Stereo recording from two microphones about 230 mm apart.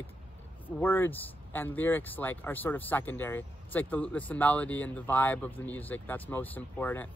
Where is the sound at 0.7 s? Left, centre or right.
Centre.